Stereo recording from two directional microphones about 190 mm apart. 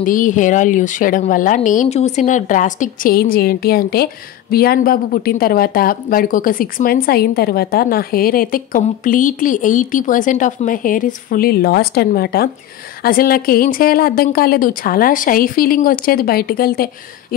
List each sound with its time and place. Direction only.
0.0 s speech: 45° left (ahead or behind)